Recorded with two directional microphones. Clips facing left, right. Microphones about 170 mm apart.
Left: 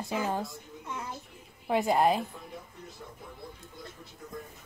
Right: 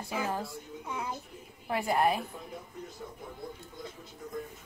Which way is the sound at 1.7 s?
20° left (ahead or behind).